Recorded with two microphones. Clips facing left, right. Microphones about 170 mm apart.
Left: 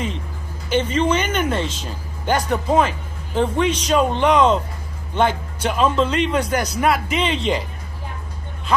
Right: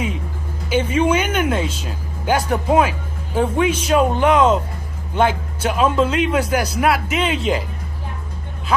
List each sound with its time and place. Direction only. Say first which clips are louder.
0.7 s speech: right 1 dB; 10° right (ahead or behind)